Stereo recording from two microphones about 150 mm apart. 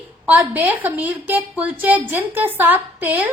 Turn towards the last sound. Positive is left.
turn(degrees=-10)  # may be behind; listen again after turning